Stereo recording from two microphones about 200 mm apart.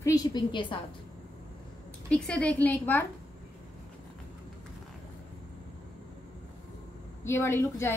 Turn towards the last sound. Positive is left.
turn(degrees=10)  # may be behind; listen again after turning